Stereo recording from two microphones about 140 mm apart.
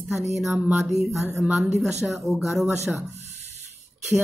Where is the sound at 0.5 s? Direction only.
15° right (ahead or behind).